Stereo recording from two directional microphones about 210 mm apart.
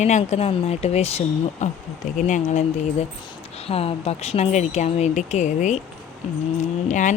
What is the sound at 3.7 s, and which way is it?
Speech, 30° left (ahead or behind).